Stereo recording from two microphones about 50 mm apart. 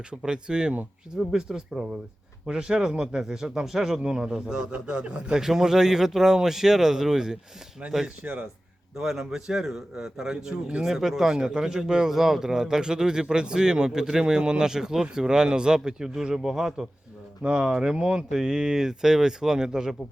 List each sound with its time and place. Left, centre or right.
0.3 s a man's voice: centre
5.4 s a man's voice: centre
8.0 s speech: right
9.0 s a man's voice: centre